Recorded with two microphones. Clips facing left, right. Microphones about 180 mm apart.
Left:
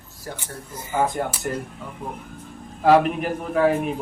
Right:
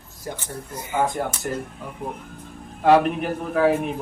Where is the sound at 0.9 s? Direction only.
Centre (ahead or behind).